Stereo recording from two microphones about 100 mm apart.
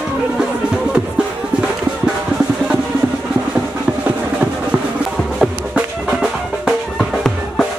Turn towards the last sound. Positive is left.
turn(degrees=0)  # may be behind; listen again after turning